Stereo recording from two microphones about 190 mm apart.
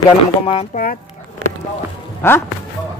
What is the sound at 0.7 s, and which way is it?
Speech, 45° left (ahead or behind).